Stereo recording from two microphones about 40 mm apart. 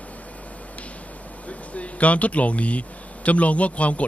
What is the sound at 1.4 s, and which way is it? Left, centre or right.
Speech, left.